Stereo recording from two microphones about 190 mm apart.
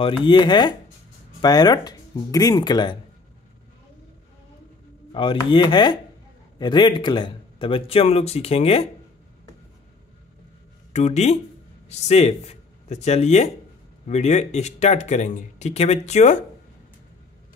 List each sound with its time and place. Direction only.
0.0 s a man's voice: 25° left (ahead or behind)
5.1 s a man's voice: 25° left (ahead or behind)
10.9 s speech: 35° left (ahead or behind)